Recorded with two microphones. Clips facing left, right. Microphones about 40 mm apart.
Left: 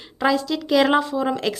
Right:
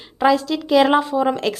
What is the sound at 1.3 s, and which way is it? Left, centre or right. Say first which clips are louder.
Speech: right 2 dB; centre.